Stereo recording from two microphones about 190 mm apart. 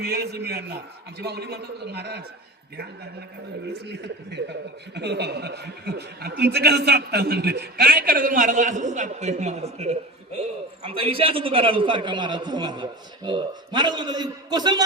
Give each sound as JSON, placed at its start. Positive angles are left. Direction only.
{"t": 0.0, "sound": "a man's voice", "side_deg": -55}
{"t": 3.7, "sound": "a man's voice", "side_deg": -60}